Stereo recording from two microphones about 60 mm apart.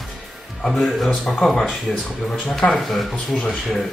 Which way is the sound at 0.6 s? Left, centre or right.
Centre.